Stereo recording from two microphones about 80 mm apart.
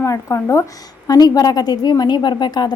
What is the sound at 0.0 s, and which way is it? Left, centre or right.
A woman's voice, left.